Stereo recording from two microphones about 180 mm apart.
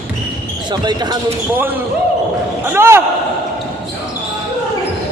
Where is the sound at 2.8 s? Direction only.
15° right (ahead or behind).